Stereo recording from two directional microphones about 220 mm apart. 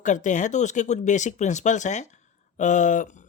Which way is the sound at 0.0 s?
35° left (ahead or behind).